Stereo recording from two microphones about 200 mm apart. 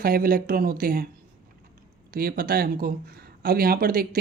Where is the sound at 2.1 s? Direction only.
50° right (ahead or behind).